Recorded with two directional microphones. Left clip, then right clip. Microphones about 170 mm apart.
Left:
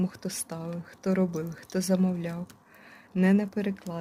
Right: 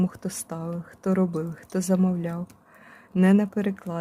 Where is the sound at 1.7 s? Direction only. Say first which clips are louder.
Right 2 dB; 30° right (ahead or behind).